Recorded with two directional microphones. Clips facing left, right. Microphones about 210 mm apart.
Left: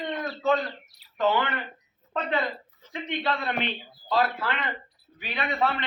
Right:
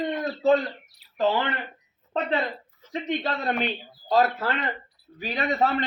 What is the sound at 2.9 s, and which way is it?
Speech, 40° right (ahead or behind).